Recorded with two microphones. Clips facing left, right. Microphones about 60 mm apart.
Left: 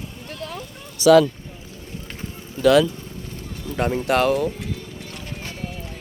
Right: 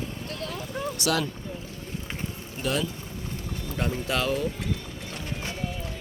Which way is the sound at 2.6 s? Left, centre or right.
Left.